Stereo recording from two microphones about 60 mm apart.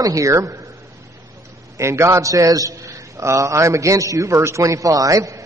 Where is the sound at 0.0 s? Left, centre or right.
Right.